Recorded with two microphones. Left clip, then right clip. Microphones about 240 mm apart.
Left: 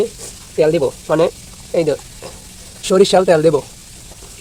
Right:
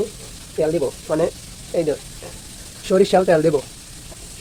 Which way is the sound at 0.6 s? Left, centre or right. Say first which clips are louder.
Left 6 dB; left.